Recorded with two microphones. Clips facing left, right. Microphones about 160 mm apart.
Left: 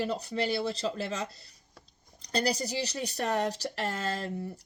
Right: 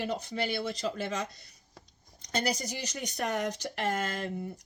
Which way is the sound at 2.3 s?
35° left (ahead or behind).